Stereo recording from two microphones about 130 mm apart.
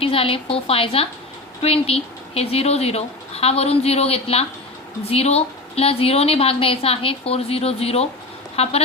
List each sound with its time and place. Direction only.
0.0 s a woman's voice: 45° left (ahead or behind)